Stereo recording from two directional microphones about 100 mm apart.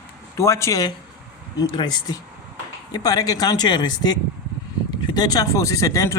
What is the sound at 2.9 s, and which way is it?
Speech, 40° left (ahead or behind).